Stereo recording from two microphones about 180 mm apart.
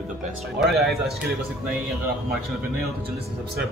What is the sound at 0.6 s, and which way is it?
Speech, centre (ahead or behind).